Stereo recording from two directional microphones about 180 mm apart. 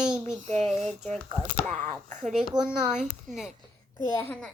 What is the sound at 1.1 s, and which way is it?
Speech, centre (ahead or behind).